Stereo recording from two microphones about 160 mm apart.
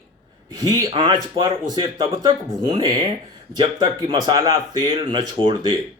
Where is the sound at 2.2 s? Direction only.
30° right (ahead or behind).